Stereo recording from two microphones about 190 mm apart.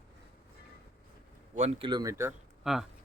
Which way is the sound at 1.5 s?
35° right (ahead or behind).